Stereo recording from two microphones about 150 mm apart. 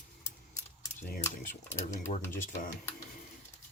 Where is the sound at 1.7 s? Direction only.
55° left (ahead or behind).